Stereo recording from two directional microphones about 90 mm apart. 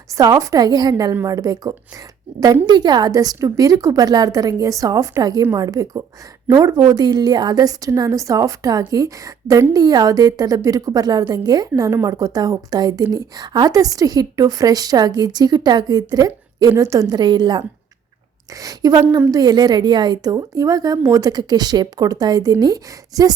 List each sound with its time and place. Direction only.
0.2 s a woman's voice: 40° right (ahead or behind)
1.1 s speech: 35° right (ahead or behind)
2.6 s a woman's voice: 50° right (ahead or behind); by 5.2 s 35° right (ahead or behind)
5.2 s a woman's voice: 45° right (ahead or behind)
18.5 s a woman's voice: 40° right (ahead or behind)